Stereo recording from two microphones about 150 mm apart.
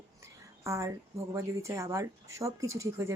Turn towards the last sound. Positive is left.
turn(degrees=-20)  # may be behind; listen again after turning